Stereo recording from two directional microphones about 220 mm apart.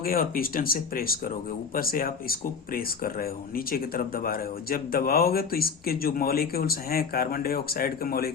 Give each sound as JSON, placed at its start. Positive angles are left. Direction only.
{"t": 0.0, "sound": "speech", "side_deg": 40}